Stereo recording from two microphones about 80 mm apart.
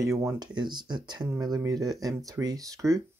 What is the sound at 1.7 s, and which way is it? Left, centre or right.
Speech, right.